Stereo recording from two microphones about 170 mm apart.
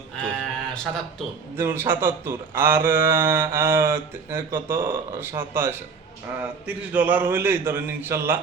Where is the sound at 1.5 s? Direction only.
15° right (ahead or behind).